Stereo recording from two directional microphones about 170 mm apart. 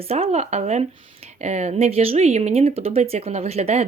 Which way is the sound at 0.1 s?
40° right (ahead or behind).